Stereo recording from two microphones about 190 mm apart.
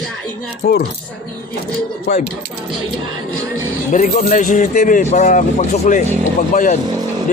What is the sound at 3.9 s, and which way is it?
Speech, 40° left (ahead or behind).